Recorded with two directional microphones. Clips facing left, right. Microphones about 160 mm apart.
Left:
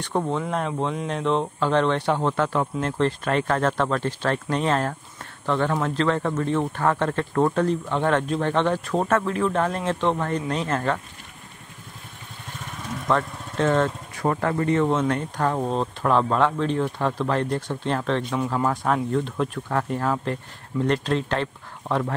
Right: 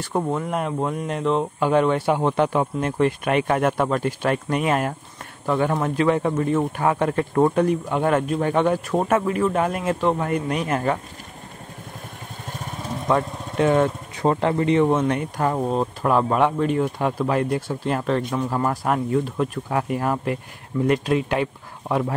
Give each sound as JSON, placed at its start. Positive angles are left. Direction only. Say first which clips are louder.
{"t": 0.0, "sound": "speech", "louder": "right 1 dB", "side_deg": -10}
{"t": 12.7, "sound": "vehicle", "louder": "right 2 dB", "side_deg": -30}
{"t": 13.1, "sound": "speech", "louder": "right 2 dB", "side_deg": -15}